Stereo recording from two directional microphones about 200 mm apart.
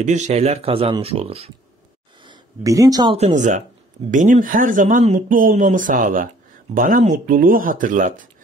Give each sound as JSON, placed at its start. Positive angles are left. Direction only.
{"t": 0.0, "sound": "speech", "side_deg": -35}
{"t": 2.2, "sound": "speech", "side_deg": -20}
{"t": 3.2, "sound": "speech", "side_deg": -35}